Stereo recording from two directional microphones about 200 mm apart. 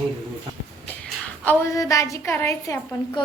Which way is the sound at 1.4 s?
15° left (ahead or behind).